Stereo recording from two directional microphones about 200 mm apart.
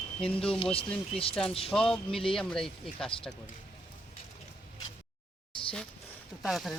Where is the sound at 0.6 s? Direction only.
30° left (ahead or behind).